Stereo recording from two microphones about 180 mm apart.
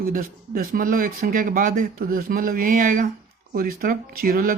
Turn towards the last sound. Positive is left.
turn(degrees=-55)  # may be behind; listen again after turning